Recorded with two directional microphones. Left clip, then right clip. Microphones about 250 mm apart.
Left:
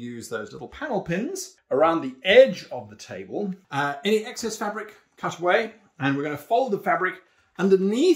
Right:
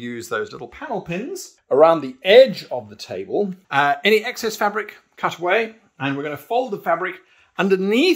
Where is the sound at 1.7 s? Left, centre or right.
Right.